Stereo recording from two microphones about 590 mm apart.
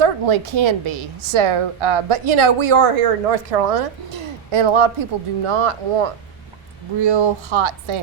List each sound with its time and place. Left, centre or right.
0.0 s a woman's voice: right
3.5 s speech: right
4.5 s speech: right
7.0 s a woman's voice: right